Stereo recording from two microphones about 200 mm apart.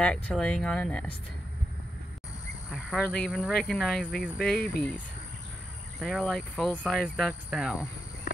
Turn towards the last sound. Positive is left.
turn(degrees=0)  # may be behind; listen again after turning